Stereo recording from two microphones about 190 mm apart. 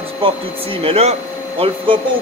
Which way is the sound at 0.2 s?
30° right (ahead or behind).